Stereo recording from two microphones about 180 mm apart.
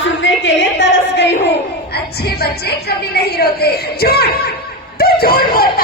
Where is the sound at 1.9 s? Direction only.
60° left (ahead or behind).